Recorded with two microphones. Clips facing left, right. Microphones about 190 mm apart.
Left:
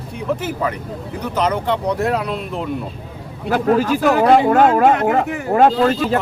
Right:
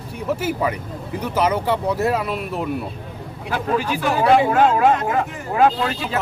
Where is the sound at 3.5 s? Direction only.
40° left (ahead or behind).